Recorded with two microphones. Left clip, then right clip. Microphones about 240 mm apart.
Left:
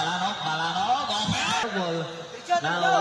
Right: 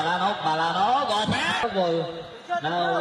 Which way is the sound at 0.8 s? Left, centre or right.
Centre.